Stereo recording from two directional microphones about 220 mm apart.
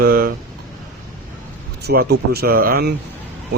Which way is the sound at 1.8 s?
45° right (ahead or behind).